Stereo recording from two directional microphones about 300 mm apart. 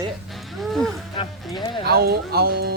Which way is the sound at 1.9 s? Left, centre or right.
Right.